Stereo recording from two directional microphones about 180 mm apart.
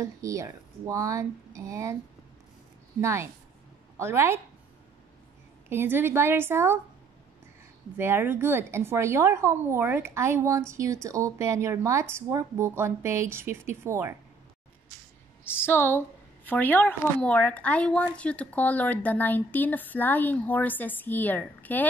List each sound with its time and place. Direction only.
0.0 s a woman's voice: 15° right (ahead or behind)
3.0 s a woman's voice: 15° right (ahead or behind)
5.7 s a woman's voice: 10° right (ahead or behind)
8.0 s a woman's voice: 15° right (ahead or behind)
15.6 s a woman's voice: 10° left (ahead or behind)